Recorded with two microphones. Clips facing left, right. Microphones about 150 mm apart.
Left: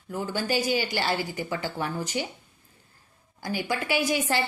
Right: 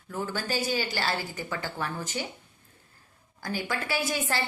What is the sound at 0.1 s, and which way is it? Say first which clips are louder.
A woman's voice: left 3 dB; 15° left (ahead or behind).